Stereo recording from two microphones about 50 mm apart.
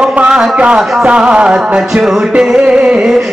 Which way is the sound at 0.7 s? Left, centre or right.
Centre.